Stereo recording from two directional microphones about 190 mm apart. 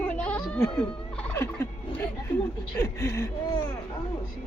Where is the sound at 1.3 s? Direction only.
15° left (ahead or behind).